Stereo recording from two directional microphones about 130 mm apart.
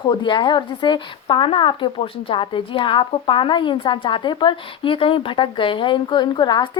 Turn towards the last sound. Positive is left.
turn(degrees=35)  # may be behind; listen again after turning